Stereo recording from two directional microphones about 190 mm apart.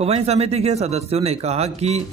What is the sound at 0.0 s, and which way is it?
Speech, 35° right (ahead or behind).